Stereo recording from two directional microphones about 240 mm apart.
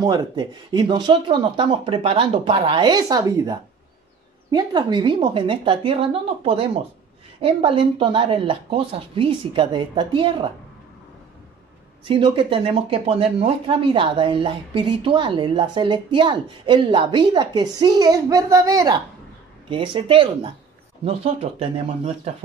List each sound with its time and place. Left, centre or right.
0.0 s speech: centre
12.0 s speech: right